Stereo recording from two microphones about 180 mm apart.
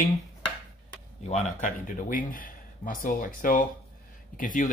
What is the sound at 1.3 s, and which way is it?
Speech, 40° left (ahead or behind).